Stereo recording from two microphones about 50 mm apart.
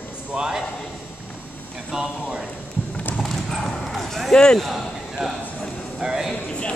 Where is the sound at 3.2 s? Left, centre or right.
Centre.